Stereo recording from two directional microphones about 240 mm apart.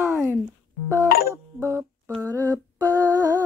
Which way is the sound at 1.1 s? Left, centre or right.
Left.